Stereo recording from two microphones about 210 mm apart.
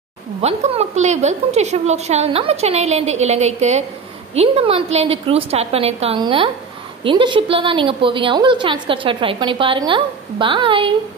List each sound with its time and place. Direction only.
0.4 s a woman's voice: 30° right (ahead or behind)